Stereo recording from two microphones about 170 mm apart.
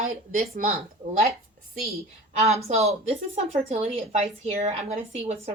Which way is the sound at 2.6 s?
40° right (ahead or behind).